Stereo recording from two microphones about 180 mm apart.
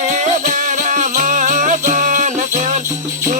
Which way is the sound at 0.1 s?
45° right (ahead or behind).